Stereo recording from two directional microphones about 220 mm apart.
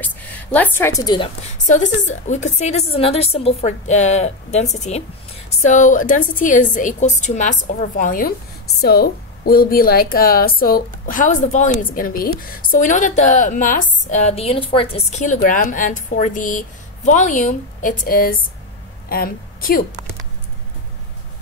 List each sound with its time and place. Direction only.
0.0 s a woman's voice: 5° left (ahead or behind)
1.7 s a woman's voice: 35° left (ahead or behind)